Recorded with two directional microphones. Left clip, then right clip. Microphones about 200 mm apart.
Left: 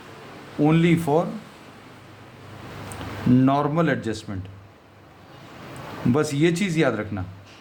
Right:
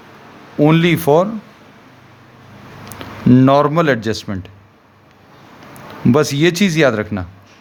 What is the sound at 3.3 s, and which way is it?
A man's voice, 45° right (ahead or behind).